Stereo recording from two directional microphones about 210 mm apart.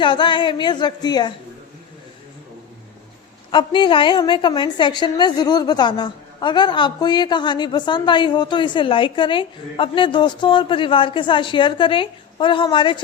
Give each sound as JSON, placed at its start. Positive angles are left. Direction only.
{"t": 0.0, "sound": "a woman's voice", "side_deg": 20}
{"t": 3.5, "sound": "a woman's voice", "side_deg": 20}